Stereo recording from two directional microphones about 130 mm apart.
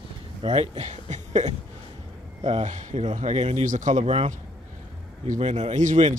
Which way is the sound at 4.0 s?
50° right (ahead or behind).